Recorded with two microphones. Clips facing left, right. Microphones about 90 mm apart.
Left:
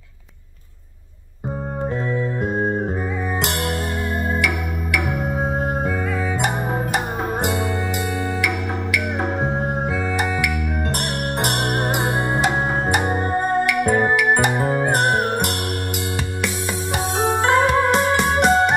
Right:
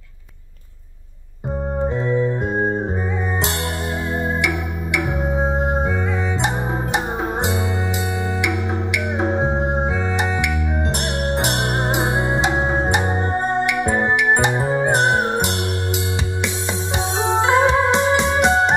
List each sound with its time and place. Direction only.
2.0 s music: 20° right (ahead or behind)
4.9 s music: 25° right (ahead or behind)
8.9 s music: 20° right (ahead or behind)
11.6 s music: 20° right (ahead or behind)
17.2 s music: 20° right (ahead or behind)
17.9 s music: 50° left (ahead or behind)